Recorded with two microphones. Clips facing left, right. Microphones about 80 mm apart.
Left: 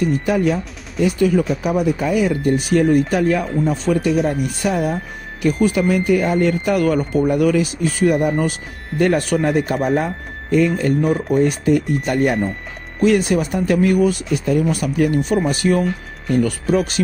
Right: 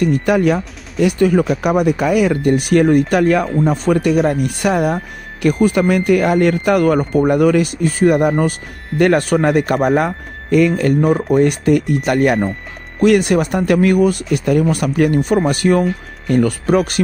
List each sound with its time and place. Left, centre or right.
0.0 s speech: right
1.1 s speech: right
1.5 s speech: right
3.6 s speech: right
4.0 s speech: right
6.8 s speech: right
8.9 s a man's voice: right
11.3 s a man's voice: right
13.0 s speech: right